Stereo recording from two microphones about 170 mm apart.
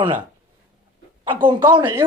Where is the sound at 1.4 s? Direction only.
25° right (ahead or behind).